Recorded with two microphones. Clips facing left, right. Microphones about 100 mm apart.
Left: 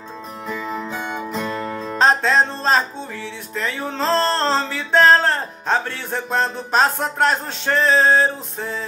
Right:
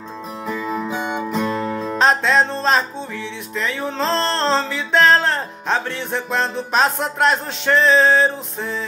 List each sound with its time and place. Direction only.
0.5 s music: 5° right (ahead or behind)
2.0 s music: 40° left (ahead or behind)